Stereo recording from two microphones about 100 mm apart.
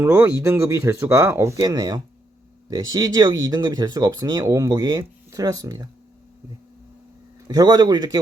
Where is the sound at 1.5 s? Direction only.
40° right (ahead or behind).